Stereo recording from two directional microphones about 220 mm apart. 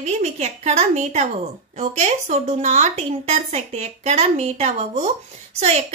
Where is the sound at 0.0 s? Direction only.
30° right (ahead or behind).